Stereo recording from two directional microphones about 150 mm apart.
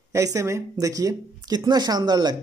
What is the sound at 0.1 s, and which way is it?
Speech, 20° right (ahead or behind).